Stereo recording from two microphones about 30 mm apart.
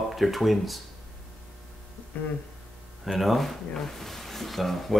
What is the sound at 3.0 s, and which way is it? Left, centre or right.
Speech, centre.